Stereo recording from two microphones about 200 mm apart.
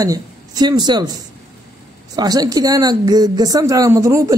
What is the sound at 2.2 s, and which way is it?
A woman's voice, 20° right (ahead or behind).